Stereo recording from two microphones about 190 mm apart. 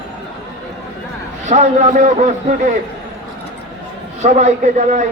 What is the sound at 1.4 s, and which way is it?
A man's voice, 40° right (ahead or behind).